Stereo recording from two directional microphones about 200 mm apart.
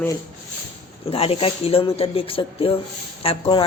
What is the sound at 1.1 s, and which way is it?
Speech, 30° left (ahead or behind).